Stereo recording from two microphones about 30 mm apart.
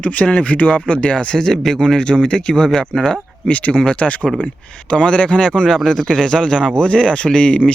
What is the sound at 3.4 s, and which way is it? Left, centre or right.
Speech, left.